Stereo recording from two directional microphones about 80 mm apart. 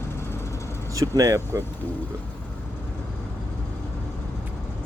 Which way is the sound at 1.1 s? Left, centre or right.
Right.